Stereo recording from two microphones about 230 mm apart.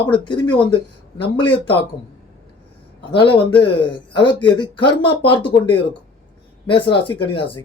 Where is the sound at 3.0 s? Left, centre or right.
Left.